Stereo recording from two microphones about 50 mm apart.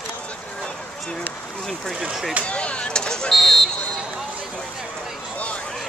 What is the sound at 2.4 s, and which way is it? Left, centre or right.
Speech, left.